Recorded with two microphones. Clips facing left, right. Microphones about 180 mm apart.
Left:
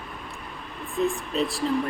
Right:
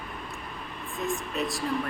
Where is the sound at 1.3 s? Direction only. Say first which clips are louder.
Left 6 dB; 30° left (ahead or behind).